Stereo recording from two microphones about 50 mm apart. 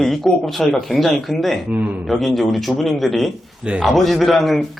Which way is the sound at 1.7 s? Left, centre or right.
Right.